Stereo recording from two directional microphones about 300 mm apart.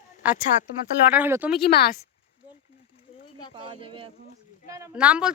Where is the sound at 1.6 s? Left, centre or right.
Left.